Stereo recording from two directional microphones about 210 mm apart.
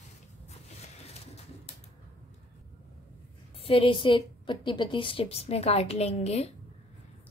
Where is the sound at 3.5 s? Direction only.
25° left (ahead or behind).